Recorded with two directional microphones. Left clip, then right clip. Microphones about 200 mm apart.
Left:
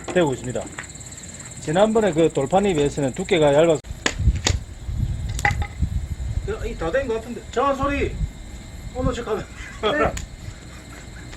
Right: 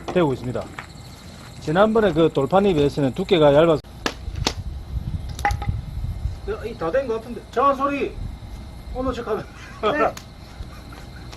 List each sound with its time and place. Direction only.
0.0 s speech: 35° right (ahead or behind)
1.6 s speech: 50° right (ahead or behind)
5.4 s a sound: 5° right (ahead or behind)
6.5 s a man's voice: centre (ahead or behind)